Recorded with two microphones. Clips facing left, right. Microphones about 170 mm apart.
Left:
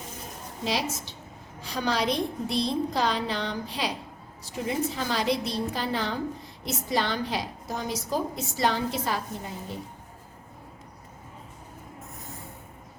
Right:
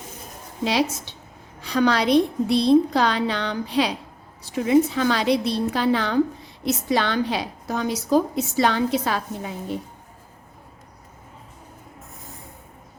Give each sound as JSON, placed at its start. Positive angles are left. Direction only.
{"t": 0.6, "sound": "a woman's voice", "side_deg": -70}